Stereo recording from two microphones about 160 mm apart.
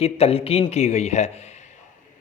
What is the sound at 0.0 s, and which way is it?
Speech, 40° left (ahead or behind).